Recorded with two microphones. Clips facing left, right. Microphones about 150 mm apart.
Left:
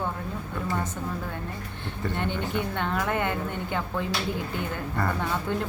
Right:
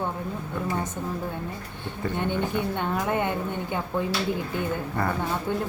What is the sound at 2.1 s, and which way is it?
A woman's voice, 15° right (ahead or behind).